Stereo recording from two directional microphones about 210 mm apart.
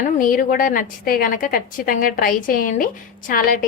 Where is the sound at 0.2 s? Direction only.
40° left (ahead or behind).